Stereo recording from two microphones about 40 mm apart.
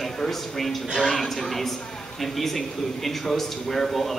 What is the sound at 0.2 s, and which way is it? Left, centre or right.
A woman's voice, centre.